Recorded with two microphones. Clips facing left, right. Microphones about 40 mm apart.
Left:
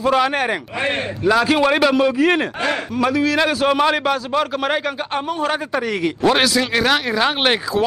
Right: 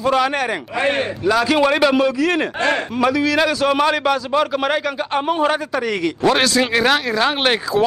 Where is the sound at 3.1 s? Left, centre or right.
Centre.